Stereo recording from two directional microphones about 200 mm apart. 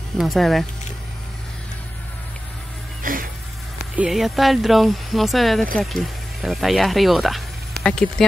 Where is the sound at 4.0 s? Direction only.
Centre (ahead or behind).